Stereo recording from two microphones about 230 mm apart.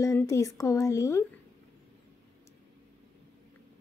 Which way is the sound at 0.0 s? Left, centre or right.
Centre.